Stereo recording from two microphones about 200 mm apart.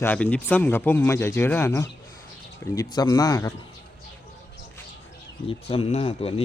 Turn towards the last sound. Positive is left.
turn(degrees=30)  # may be behind; listen again after turning